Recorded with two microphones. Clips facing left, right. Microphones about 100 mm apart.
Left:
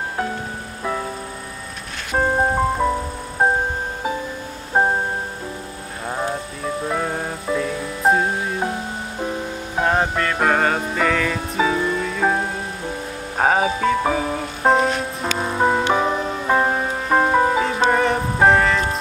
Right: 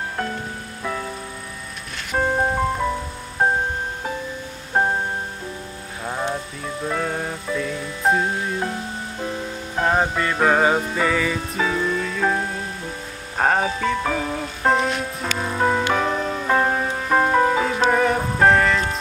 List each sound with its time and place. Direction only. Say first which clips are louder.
2.1 s music: left 2 dB; 15° left (ahead or behind)
4.7 s music: left 2 dB; 10° left (ahead or behind)
6.0 s music: left 1 dB; 5° left (ahead or behind)
9.8 s music: left 1 dB; centre (ahead or behind)
11.5 s music: left 4 dB; 5° left (ahead or behind)
13.4 s music: left 2 dB; 5° left (ahead or behind)